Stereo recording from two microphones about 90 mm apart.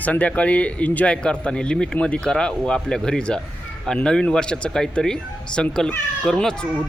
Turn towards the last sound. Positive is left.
turn(degrees=5)  # may be behind; listen again after turning